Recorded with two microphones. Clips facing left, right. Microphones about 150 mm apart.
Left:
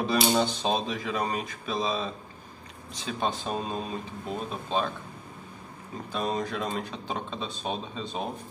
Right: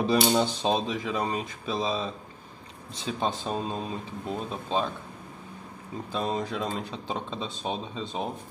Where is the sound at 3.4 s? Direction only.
15° left (ahead or behind).